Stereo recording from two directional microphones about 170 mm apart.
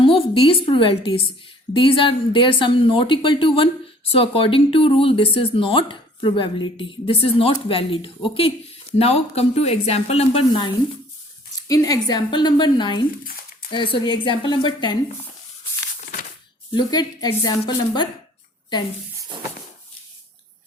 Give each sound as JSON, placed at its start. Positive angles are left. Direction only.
{"t": 0.0, "sound": "a woman's voice", "side_deg": 30}
{"t": 11.5, "sound": "speech", "side_deg": 20}
{"t": 13.2, "sound": "a sound", "side_deg": 60}
{"t": 13.7, "sound": "speech", "side_deg": 30}
{"t": 16.7, "sound": "speech", "side_deg": 25}